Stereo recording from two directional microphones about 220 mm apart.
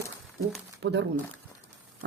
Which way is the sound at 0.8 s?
50° right (ahead or behind).